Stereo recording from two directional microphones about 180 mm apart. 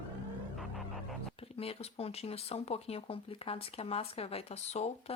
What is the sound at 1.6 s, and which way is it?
Speech, 35° left (ahead or behind).